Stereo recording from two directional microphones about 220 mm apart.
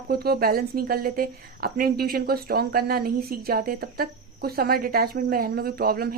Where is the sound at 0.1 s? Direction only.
45° right (ahead or behind).